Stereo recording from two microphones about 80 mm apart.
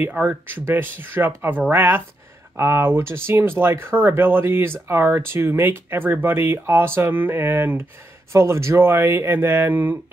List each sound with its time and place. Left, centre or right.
0.0 s speech: centre